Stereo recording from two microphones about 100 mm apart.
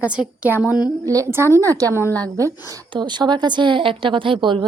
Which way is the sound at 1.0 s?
35° right (ahead or behind).